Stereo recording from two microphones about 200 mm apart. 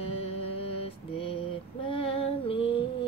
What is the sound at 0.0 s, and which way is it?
Mantra, 30° left (ahead or behind).